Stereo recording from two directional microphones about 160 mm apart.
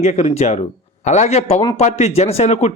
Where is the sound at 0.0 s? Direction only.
45° left (ahead or behind).